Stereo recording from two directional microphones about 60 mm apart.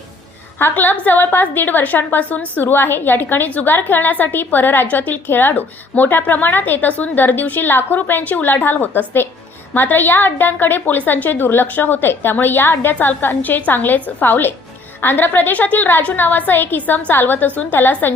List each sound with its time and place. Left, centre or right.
0.7 s a woman's voice: left